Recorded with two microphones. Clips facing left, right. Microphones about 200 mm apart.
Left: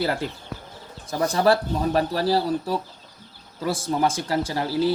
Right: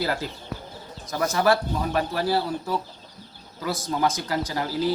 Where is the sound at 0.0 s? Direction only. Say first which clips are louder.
Left 2 dB; 25° left (ahead or behind).